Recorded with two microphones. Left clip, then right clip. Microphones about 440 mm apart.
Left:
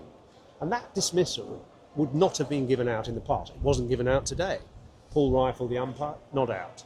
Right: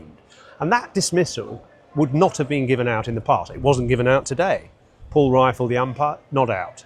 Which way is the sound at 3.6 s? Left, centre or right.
Right.